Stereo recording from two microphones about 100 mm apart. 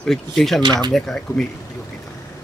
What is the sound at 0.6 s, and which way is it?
Speech, 45° right (ahead or behind).